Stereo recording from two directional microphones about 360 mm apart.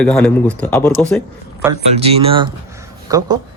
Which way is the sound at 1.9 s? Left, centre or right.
Centre.